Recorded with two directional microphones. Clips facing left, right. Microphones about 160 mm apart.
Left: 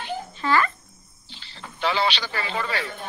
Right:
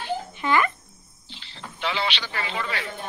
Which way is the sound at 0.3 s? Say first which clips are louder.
Left 1 dB; 15° right (ahead or behind).